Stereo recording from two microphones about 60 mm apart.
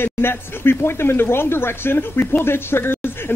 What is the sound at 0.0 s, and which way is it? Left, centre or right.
Speech, left.